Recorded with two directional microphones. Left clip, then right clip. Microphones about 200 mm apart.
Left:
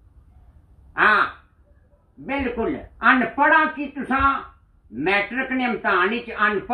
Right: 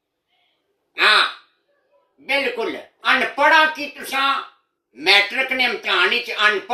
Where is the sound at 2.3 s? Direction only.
15° right (ahead or behind).